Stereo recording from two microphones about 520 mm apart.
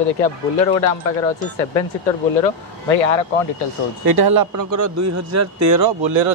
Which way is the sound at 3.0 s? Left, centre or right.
Left.